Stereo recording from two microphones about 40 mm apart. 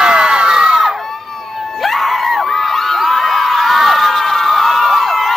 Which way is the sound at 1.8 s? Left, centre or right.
Centre.